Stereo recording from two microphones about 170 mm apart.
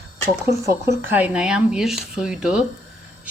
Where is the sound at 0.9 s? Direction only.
10° right (ahead or behind).